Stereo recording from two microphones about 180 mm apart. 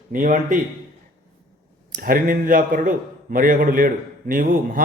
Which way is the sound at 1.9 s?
50° right (ahead or behind).